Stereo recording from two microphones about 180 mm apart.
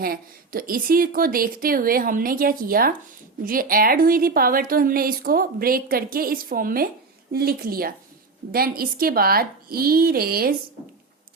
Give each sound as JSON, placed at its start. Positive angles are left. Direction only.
{"t": 0.0, "sound": "a woman's voice", "side_deg": -55}